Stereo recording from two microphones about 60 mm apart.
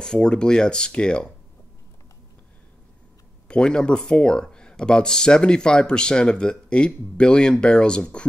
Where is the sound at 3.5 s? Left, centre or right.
Centre.